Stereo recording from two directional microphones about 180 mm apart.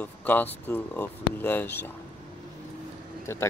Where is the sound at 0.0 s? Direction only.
10° left (ahead or behind).